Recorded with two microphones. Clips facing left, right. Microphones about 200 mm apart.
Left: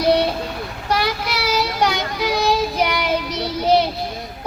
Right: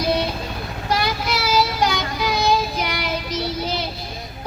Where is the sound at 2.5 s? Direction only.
65° left (ahead or behind).